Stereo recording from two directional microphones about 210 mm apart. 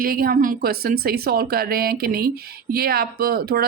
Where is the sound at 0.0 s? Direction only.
45° right (ahead or behind).